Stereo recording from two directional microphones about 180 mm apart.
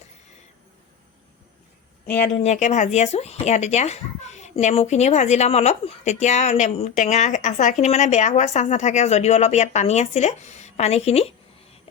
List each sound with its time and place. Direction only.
2.4 s speech: 40° left (ahead or behind)